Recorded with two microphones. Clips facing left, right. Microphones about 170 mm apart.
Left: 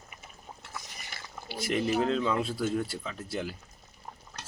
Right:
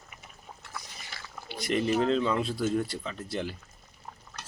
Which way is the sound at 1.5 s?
Centre (ahead or behind).